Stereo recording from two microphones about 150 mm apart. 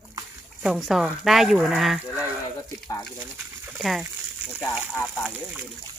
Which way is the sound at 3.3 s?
10° right (ahead or behind).